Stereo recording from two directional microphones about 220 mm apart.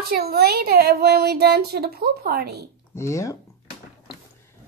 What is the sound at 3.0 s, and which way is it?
Speech, 15° left (ahead or behind).